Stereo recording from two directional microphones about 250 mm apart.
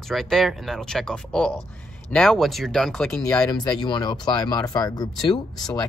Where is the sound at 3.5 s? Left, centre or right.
Centre.